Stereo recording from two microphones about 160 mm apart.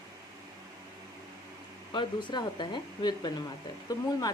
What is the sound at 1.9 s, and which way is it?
Speech, 30° left (ahead or behind).